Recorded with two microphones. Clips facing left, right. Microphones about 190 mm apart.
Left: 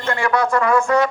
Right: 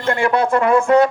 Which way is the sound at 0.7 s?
55° right (ahead or behind).